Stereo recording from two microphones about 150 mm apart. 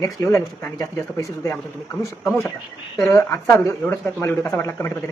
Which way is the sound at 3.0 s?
20° left (ahead or behind).